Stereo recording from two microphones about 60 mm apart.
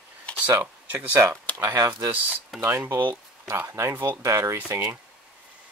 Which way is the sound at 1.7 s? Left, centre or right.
Right.